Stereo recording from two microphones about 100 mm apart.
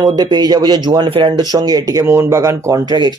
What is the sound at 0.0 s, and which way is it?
Speech, 45° right (ahead or behind).